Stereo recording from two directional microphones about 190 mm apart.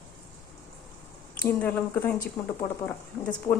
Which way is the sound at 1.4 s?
10° left (ahead or behind).